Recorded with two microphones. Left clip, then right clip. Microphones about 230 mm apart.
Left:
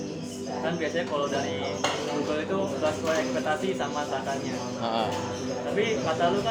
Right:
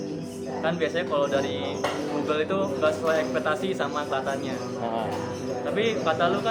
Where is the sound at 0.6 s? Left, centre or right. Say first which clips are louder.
Right 3 dB; right.